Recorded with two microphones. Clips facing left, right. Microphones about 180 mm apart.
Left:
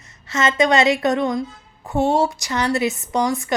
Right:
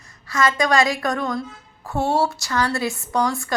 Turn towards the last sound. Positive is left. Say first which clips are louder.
# left 2 dB
turn(degrees=20)  # may be behind; listen again after turning